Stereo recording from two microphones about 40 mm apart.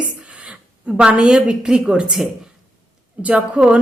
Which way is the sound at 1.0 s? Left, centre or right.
Right.